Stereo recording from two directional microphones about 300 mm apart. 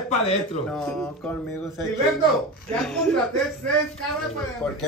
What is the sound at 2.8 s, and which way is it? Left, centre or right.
Speech, centre.